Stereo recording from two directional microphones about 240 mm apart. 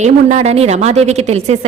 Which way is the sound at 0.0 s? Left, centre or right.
Right.